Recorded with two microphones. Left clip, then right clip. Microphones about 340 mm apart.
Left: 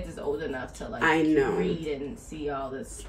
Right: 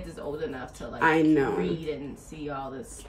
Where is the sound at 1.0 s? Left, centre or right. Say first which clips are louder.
Right 1 dB; centre.